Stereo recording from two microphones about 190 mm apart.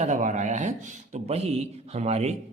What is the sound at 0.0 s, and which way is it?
Speech, 40° right (ahead or behind).